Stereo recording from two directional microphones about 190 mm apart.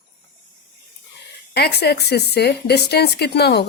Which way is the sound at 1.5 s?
55° left (ahead or behind).